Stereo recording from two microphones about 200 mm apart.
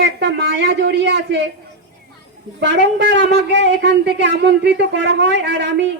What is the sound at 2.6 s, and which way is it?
Speech, 60° right (ahead or behind).